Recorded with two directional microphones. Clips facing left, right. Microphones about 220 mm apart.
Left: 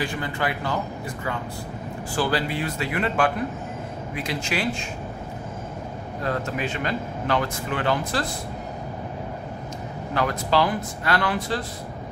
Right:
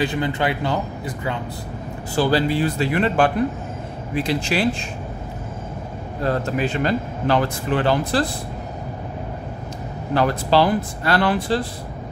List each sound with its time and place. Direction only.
0.0 s speech: 20° right (ahead or behind)
2.1 s a man's voice: 30° right (ahead or behind)
6.2 s a man's voice: 35° right (ahead or behind)
10.1 s a man's voice: 30° right (ahead or behind)